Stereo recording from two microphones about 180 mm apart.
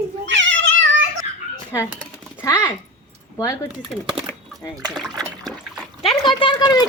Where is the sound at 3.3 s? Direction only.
20° left (ahead or behind).